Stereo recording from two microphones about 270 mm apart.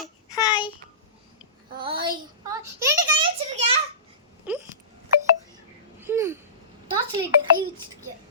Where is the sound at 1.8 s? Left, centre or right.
Centre.